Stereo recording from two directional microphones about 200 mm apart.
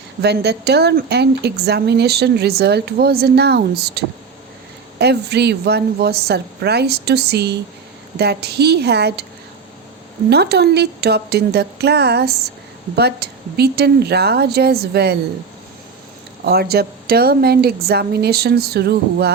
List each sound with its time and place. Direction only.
0.2 s a woman's voice: 55° right (ahead or behind)
10.2 s a woman's voice: 55° right (ahead or behind)
16.5 s a woman's voice: 50° right (ahead or behind)